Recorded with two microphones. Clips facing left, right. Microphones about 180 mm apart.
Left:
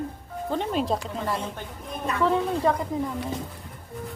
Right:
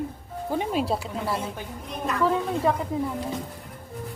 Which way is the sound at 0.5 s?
10° right (ahead or behind).